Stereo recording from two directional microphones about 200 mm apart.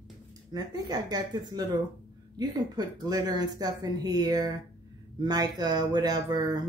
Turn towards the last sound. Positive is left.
turn(degrees=-20)  # may be behind; listen again after turning